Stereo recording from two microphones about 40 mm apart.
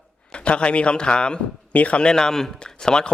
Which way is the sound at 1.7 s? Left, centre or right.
Left.